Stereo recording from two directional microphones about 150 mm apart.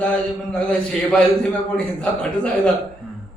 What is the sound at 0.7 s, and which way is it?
A man's voice, 5° left (ahead or behind).